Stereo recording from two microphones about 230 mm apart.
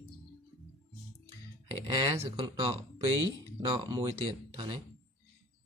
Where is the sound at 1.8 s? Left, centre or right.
Right.